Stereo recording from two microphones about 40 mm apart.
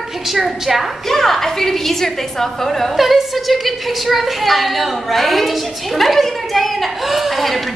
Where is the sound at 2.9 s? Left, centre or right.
Centre.